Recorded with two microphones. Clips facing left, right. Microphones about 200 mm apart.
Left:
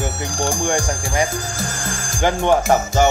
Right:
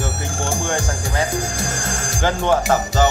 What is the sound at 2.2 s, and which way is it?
Speech, 15° left (ahead or behind).